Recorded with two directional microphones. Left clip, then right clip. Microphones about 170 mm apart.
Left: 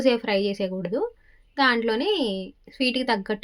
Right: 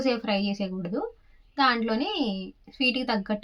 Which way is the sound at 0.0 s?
30° left (ahead or behind).